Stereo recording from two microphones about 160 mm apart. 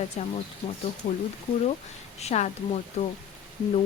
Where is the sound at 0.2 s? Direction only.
45° left (ahead or behind).